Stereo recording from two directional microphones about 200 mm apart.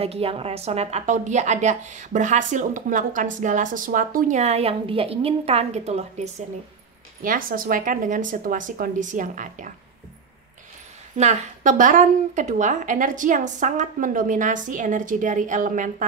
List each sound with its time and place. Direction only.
0.0 s a woman's voice: 30° right (ahead or behind)
7.2 s a woman's voice: 45° right (ahead or behind)
11.1 s a woman's voice: 35° right (ahead or behind)